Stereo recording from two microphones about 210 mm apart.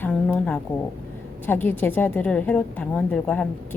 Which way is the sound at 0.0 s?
5° left (ahead or behind).